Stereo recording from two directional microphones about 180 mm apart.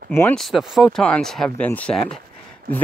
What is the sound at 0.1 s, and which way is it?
Speech, 10° left (ahead or behind).